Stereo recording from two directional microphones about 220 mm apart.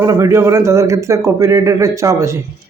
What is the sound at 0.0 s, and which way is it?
Speech, 15° right (ahead or behind).